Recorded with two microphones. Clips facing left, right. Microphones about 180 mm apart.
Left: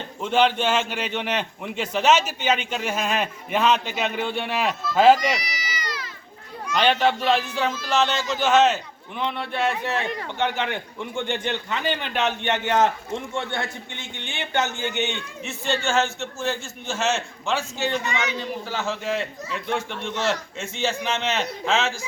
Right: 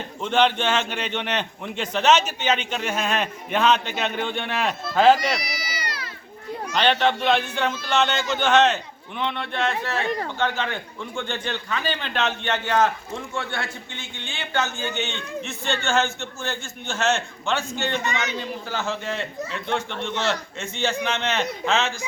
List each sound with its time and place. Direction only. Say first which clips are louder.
0.2 s a man's voice: even; 5° left (ahead or behind)
6.7 s speech: left 1 dB; 10° left (ahead or behind)
10.1 s speech: right 4 dB; 40° right (ahead or behind)
10.3 s a man's voice: even; 15° left (ahead or behind)
18.0 s a man's voice: even; 40° right (ahead or behind)
18.3 s speech: even; centre (ahead or behind)